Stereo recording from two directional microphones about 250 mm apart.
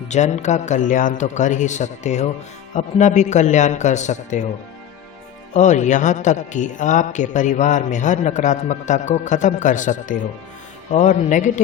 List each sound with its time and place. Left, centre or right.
0.1 s a man's voice: left
5.5 s a man's voice: left